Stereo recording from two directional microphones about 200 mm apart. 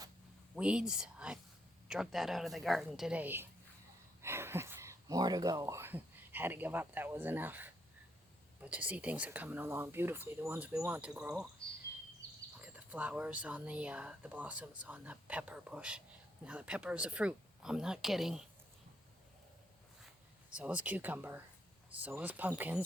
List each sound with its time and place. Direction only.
0.5 s speech: 5° right (ahead or behind)
12.2 s a sound: 15° right (ahead or behind)
12.6 s speech: 10° right (ahead or behind)
20.5 s speech: 5° right (ahead or behind)